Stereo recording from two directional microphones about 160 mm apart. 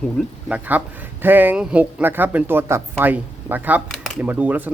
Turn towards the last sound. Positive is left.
turn(degrees=-10)  # may be behind; listen again after turning